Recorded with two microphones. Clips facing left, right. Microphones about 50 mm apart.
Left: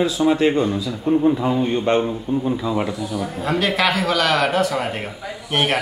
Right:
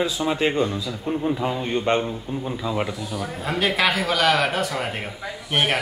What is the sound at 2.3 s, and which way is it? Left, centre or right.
Speech, centre.